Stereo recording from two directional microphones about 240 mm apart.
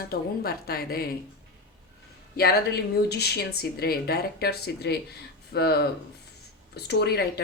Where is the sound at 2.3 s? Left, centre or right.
Left.